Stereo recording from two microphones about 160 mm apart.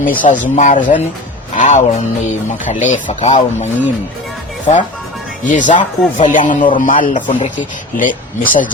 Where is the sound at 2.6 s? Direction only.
50° left (ahead or behind).